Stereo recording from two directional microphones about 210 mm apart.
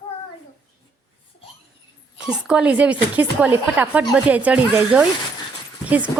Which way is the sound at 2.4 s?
5° right (ahead or behind).